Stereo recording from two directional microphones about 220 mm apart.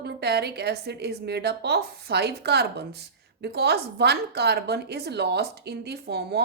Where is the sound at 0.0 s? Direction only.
50° right (ahead or behind).